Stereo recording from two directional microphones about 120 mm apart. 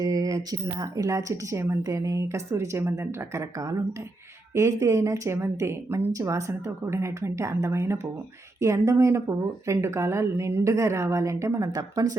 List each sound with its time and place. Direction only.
0.0 s speech: 30° right (ahead or behind)